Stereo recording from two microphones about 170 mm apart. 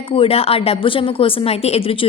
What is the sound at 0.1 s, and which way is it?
A woman's voice, 35° left (ahead or behind).